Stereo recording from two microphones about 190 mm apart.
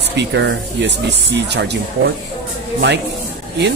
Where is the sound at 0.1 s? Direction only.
65° right (ahead or behind).